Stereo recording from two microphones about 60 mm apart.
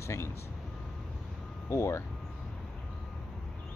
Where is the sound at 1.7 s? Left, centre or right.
Left.